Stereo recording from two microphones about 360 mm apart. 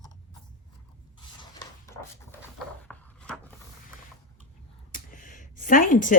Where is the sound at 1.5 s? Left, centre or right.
Centre.